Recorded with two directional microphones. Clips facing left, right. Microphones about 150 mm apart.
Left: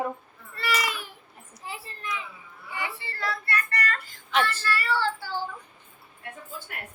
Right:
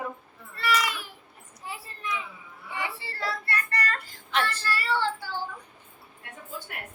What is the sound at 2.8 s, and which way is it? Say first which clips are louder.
Speech: even; 30° right (ahead or behind).